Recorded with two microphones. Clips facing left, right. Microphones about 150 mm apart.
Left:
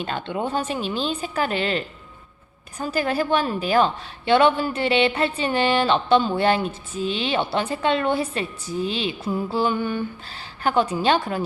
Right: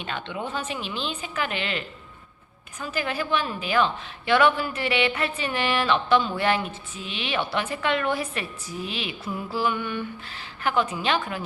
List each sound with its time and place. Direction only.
0.0 s a woman's voice: 40° left (ahead or behind)
4.3 s a woman's voice: 30° left (ahead or behind)